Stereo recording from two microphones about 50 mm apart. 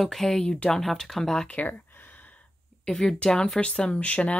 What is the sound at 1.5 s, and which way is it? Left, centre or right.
Speech, left.